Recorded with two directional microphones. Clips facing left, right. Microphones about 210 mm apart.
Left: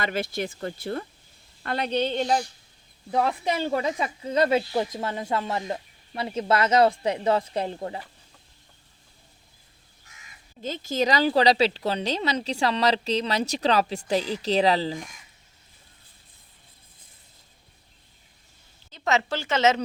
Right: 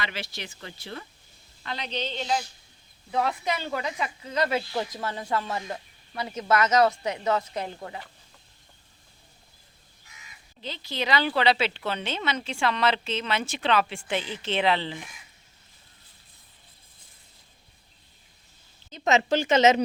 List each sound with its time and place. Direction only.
0.0 s speech: 50° left (ahead or behind)
3.1 s speech: 30° left (ahead or behind)
10.6 s speech: 45° left (ahead or behind)
18.9 s speech: 20° right (ahead or behind)